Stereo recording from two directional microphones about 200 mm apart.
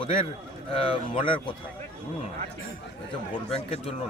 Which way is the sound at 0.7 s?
25° left (ahead or behind).